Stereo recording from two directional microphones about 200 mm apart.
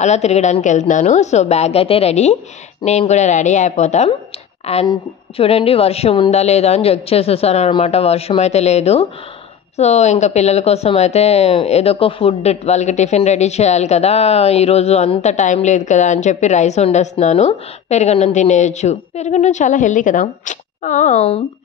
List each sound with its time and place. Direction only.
0.0 s speech: 35° left (ahead or behind)